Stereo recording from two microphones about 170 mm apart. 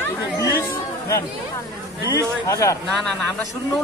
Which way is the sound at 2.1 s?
20° left (ahead or behind).